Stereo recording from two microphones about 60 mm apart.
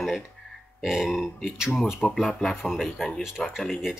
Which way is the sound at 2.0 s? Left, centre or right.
Centre.